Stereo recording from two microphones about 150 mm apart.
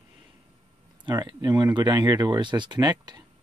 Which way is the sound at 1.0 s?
30° right (ahead or behind).